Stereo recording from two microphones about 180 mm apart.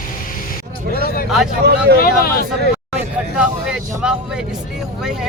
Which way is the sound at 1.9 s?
55° left (ahead or behind).